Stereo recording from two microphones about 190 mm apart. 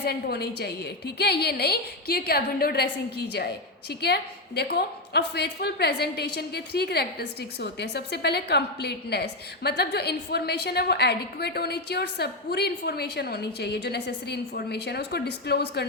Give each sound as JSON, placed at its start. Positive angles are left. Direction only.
{"t": 0.0, "sound": "a woman's voice", "side_deg": 55}